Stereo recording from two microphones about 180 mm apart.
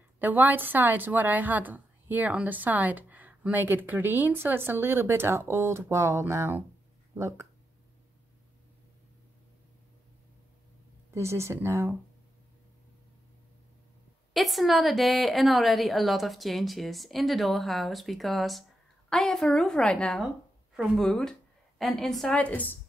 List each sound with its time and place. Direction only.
0.2 s a woman's voice: 10° right (ahead or behind)
11.1 s a woman's voice: 15° right (ahead or behind)
14.3 s a woman's voice: centre (ahead or behind)